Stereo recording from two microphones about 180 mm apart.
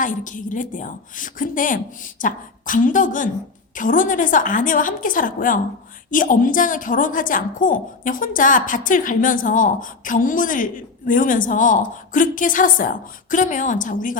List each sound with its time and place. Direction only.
0.0 s a woman's voice: 45° left (ahead or behind)